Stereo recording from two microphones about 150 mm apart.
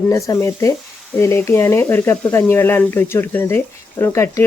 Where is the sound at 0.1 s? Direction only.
20° left (ahead or behind).